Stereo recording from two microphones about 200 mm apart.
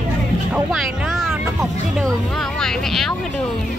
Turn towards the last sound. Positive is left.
turn(degrees=0)  # may be behind; listen again after turning